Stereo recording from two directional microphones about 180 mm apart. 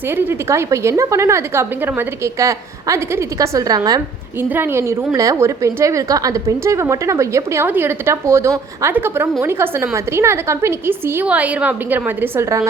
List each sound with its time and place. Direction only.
0.1 s a woman's voice: 15° right (ahead or behind)